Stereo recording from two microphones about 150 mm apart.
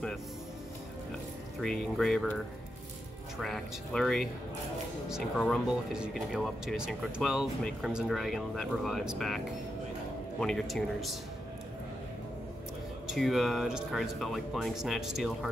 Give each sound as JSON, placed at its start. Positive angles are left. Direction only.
{"t": 1.6, "sound": "speech", "side_deg": 5}
{"t": 3.3, "sound": "speech", "side_deg": 0}
{"t": 5.4, "sound": "speech", "side_deg": 0}
{"t": 10.4, "sound": "speech", "side_deg": 0}
{"t": 13.0, "sound": "speech", "side_deg": 0}